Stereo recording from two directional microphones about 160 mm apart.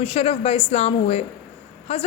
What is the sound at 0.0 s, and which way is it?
A woman's voice, 35° left (ahead or behind).